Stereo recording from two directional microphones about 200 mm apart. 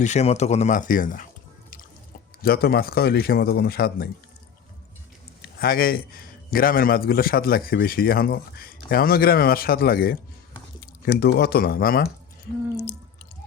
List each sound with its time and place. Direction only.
0.0 s speech: 35° left (ahead or behind)
2.4 s a man's voice: 50° left (ahead or behind)
5.4 s a man's voice: 50° left (ahead or behind)